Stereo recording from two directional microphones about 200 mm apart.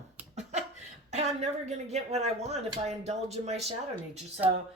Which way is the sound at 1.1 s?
35° right (ahead or behind).